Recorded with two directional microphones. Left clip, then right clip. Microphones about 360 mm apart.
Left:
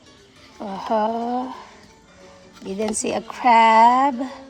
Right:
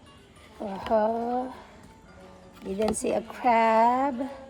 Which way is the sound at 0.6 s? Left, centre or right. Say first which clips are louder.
Left 3 dB; left.